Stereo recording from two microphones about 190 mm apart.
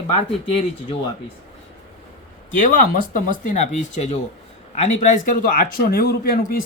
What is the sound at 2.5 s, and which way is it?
A man's voice, 45° left (ahead or behind).